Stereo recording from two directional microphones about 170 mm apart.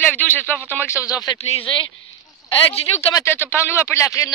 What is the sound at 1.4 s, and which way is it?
Speech, 35° left (ahead or behind).